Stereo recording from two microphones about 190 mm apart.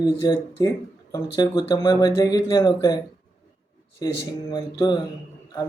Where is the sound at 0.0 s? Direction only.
20° left (ahead or behind).